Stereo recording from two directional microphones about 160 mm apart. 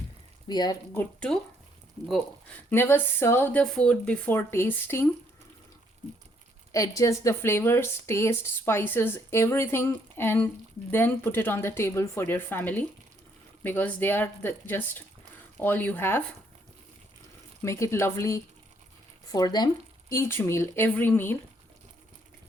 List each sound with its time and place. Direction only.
0.4 s speech: 25° left (ahead or behind)
0.9 s speech: 5° left (ahead or behind)
6.7 s speech: 20° left (ahead or behind)
17.6 s speech: 20° left (ahead or behind)